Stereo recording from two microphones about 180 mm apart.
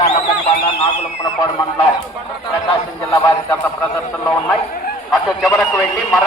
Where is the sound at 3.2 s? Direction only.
15° left (ahead or behind).